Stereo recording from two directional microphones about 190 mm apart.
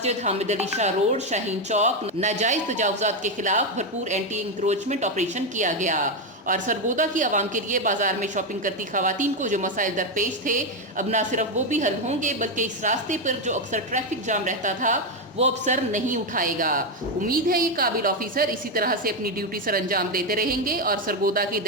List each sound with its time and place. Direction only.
0.0 s a woman's voice: 35° right (ahead or behind); by 21.7 s 50° right (ahead or behind)